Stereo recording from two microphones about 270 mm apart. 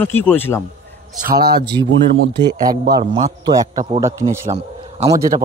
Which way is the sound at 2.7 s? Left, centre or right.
Centre.